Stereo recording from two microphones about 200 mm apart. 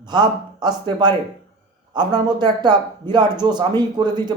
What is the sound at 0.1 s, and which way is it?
Speech, 20° right (ahead or behind).